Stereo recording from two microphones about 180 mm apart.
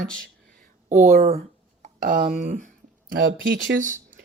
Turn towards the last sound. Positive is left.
turn(degrees=-45)  # may be behind; listen again after turning